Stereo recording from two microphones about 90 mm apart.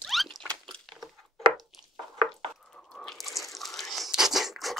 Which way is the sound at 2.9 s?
5° left (ahead or behind).